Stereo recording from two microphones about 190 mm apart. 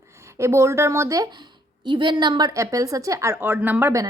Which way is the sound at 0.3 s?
15° right (ahead or behind).